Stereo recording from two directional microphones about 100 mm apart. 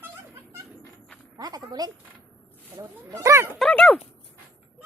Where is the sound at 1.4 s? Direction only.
40° right (ahead or behind).